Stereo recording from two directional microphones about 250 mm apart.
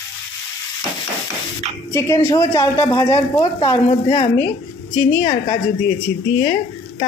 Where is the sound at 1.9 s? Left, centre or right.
Centre.